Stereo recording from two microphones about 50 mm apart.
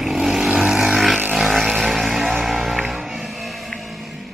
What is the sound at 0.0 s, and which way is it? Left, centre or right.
Vehicle, centre.